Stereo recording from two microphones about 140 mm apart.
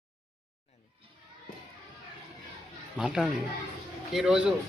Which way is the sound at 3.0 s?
5° right (ahead or behind).